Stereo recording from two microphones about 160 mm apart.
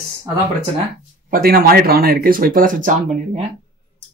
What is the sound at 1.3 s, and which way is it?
Speech, 65° right (ahead or behind).